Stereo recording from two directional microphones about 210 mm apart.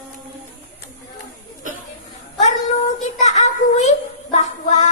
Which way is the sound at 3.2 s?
35° left (ahead or behind).